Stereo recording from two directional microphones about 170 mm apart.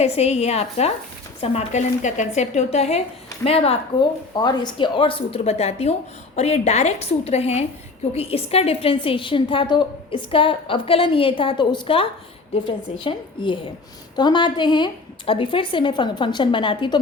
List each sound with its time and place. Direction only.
0.0 s a woman's voice: 40° left (ahead or behind)